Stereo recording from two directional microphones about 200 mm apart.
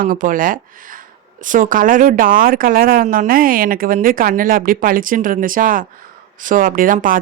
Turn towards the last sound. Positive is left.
turn(degrees=-45)  # may be behind; listen again after turning